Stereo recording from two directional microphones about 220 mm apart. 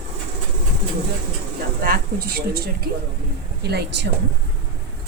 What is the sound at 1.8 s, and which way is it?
A woman's voice, 45° right (ahead or behind).